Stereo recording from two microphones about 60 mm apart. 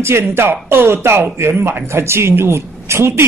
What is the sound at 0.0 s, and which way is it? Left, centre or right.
Speech, right.